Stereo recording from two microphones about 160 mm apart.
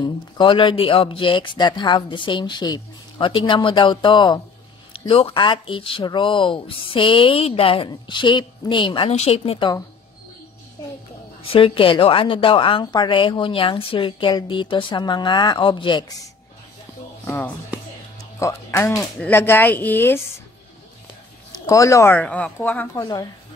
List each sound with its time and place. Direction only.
0.0 s a woman's voice: 30° left (ahead or behind)
11.4 s a woman's voice: 35° left (ahead or behind)
17.2 s speech: 15° left (ahead or behind)
21.5 s speech: 20° left (ahead or behind)